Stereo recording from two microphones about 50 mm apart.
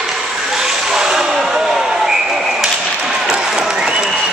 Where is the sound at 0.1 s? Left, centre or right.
Centre.